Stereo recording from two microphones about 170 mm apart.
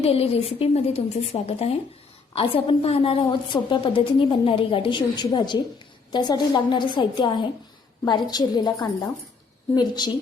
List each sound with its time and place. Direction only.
0.0 s a woman's voice: 35° left (ahead or behind)